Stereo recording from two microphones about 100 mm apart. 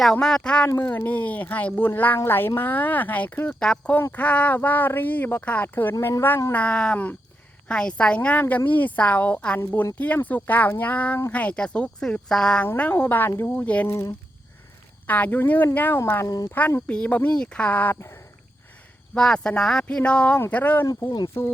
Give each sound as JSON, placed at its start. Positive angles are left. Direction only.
{"t": 0.0, "sound": "a woman's voice", "side_deg": 5}
{"t": 5.9, "sound": "speech", "side_deg": 30}
{"t": 6.5, "sound": "a woman's voice", "side_deg": 10}
{"t": 9.6, "sound": "a woman's voice", "side_deg": 25}
{"t": 12.6, "sound": "a woman's voice", "side_deg": 20}
{"t": 13.8, "sound": "a woman's voice", "side_deg": 25}
{"t": 16.2, "sound": "speech", "side_deg": 40}
{"t": 16.5, "sound": "a woman's voice", "side_deg": 20}
{"t": 19.1, "sound": "a woman's voice", "side_deg": 10}